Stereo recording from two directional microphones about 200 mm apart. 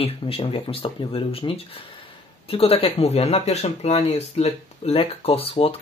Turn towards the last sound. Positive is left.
turn(degrees=30)  # may be behind; listen again after turning